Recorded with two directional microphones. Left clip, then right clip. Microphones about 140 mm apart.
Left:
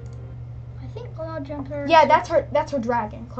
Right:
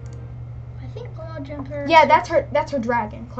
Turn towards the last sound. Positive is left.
turn(degrees=-5)  # may be behind; listen again after turning